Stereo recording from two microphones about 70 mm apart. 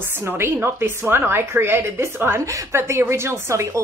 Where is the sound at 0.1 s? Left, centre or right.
Right.